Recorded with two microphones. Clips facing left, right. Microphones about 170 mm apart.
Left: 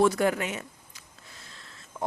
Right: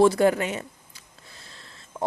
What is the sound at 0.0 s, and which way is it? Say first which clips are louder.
Speech: right 5 dB; 30° right (ahead or behind).